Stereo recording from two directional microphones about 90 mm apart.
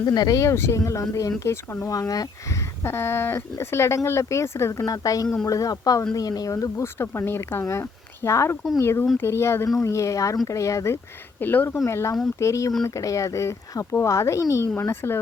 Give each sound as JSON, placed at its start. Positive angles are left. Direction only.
{"t": 0.0, "sound": "speech", "side_deg": 45}
{"t": 1.9, "sound": "speech", "side_deg": 45}
{"t": 2.8, "sound": "speech", "side_deg": 25}
{"t": 4.8, "sound": "speech", "side_deg": 40}
{"t": 11.3, "sound": "speech", "side_deg": 20}
{"t": 11.9, "sound": "speech", "side_deg": 30}